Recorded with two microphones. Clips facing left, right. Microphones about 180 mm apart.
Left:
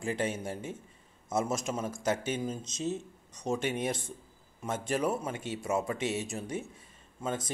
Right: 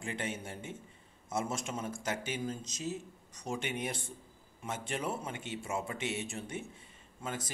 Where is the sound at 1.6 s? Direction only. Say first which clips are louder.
Left 5 dB; 30° left (ahead or behind).